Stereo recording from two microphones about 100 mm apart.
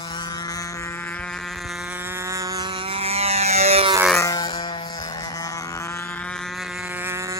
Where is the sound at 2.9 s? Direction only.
80° right.